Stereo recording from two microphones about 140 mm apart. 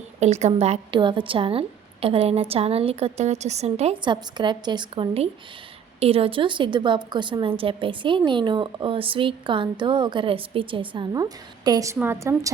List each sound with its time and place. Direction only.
0.2 s speech: 55° right (ahead or behind)
4.0 s a woman's voice: 35° right (ahead or behind)